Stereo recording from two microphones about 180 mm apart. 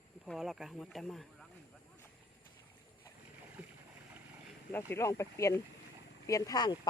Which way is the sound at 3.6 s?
10° right (ahead or behind).